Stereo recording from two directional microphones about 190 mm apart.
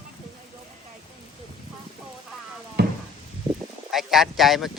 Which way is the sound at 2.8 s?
60° right (ahead or behind).